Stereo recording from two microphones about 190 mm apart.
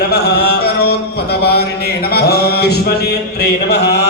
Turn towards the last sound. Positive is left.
turn(degrees=60)  # may be behind; listen again after turning